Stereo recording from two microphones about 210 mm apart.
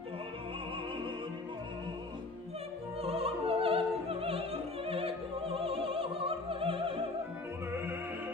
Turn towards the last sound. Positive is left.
turn(degrees=-25)  # may be behind; listen again after turning